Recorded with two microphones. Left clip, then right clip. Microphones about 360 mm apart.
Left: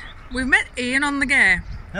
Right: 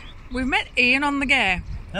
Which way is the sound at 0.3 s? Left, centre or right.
Centre.